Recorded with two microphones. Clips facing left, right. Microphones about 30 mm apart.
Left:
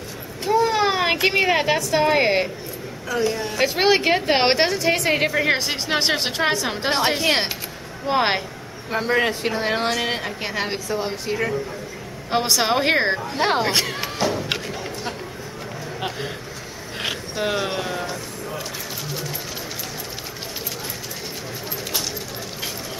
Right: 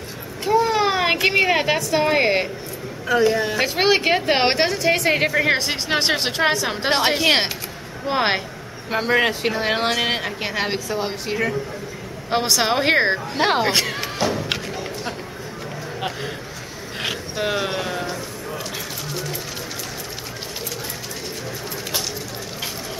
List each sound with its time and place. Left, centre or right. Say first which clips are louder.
0.4 s speech: right 1 dB; centre
3.1 s a woman's voice: right 5 dB; right
3.5 s a woman's voice: even; centre
8.1 s a woman's voice: even; centre
8.9 s a woman's voice: right 2 dB; centre
12.3 s a woman's voice: even; centre
17.0 s a sound: even; centre